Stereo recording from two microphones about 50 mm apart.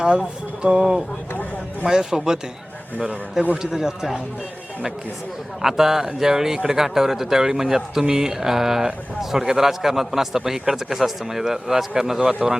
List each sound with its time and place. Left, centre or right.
0.0 s a man's voice: centre
3.6 s a man's voice: centre
5.6 s a man's voice: centre
12.2 s a man's voice: right